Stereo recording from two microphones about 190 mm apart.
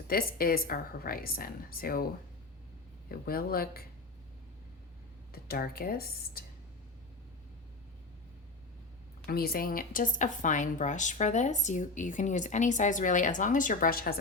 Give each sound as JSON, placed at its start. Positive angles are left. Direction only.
{"t": 0.1, "sound": "a woman's voice", "side_deg": 50}
{"t": 3.1, "sound": "a woman's voice", "side_deg": 50}
{"t": 5.3, "sound": "a woman's voice", "side_deg": 50}
{"t": 9.2, "sound": "speech", "side_deg": 55}